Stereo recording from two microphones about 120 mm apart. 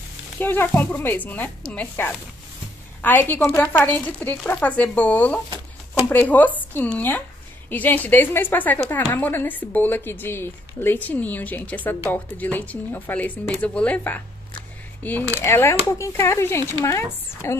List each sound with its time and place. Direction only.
0.4 s a woman's voice: 15° left (ahead or behind)